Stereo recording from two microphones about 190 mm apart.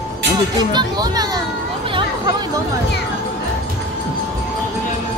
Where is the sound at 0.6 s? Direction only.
25° right (ahead or behind).